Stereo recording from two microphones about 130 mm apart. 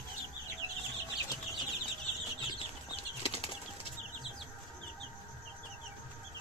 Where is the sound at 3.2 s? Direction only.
45° left (ahead or behind).